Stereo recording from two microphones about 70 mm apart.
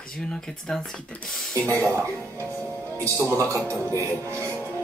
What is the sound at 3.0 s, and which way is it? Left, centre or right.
Speech, right.